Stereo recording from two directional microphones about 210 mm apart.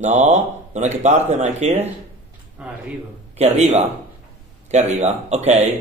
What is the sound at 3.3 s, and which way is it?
A man's voice, 30° right (ahead or behind).